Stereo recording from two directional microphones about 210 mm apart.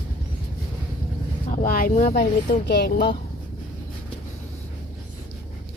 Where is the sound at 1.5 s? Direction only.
45° left (ahead or behind).